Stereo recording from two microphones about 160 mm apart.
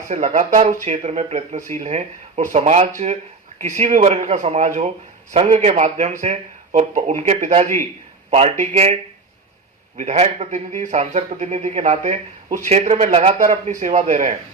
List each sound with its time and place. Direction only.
0.1 s a man's voice: 45° right (ahead or behind)
10.0 s a man's voice: 45° right (ahead or behind)